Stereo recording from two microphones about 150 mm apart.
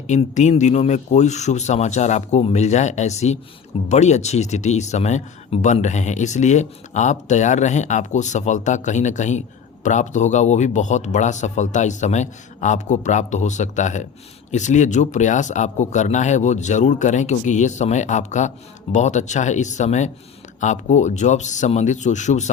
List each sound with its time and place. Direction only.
0.1 s speech: 50° left (ahead or behind)